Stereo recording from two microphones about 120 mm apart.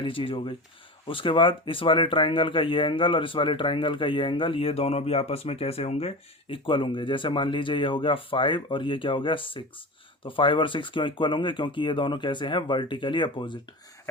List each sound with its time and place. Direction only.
0.0 s speech: 50° left (ahead or behind)